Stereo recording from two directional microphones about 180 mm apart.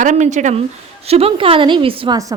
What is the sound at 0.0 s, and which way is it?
A woman's voice, 40° right (ahead or behind).